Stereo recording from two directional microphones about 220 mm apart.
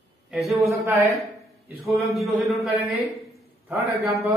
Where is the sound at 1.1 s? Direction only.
Centre (ahead or behind).